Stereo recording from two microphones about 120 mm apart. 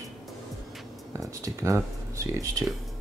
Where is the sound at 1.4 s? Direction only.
25° right (ahead or behind).